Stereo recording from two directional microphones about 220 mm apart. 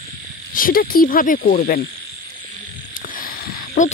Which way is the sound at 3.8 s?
35° left (ahead or behind).